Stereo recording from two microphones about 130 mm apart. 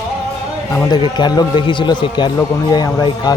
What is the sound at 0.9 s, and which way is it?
A man's voice, 35° left (ahead or behind).